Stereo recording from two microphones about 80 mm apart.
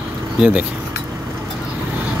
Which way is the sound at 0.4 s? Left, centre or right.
Centre.